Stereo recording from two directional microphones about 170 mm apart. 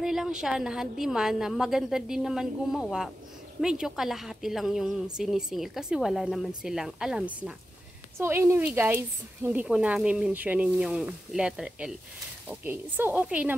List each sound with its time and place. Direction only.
0.0 s a woman's voice: 5° right (ahead or behind)
8.2 s speech: 15° right (ahead or behind)